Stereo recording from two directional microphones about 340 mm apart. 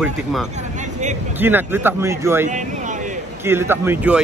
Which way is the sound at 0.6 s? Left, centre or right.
Right.